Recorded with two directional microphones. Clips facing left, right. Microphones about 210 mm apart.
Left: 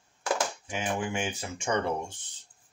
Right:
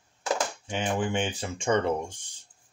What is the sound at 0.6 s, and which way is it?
Speech, 30° right (ahead or behind).